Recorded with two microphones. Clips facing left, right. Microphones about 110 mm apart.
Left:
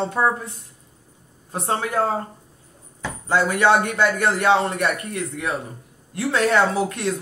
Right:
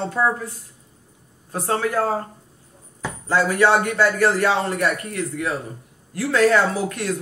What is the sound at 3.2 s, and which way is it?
Speech, 25° left (ahead or behind).